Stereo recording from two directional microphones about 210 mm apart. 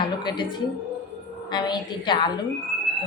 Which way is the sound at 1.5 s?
20° left (ahead or behind).